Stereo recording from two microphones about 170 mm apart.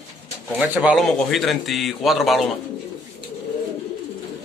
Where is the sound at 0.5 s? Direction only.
5° right (ahead or behind).